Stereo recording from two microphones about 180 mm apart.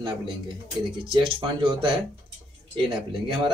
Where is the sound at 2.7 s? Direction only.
25° right (ahead or behind).